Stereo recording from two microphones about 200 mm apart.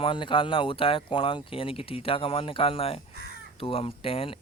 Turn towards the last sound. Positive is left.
turn(degrees=30)  # may be behind; listen again after turning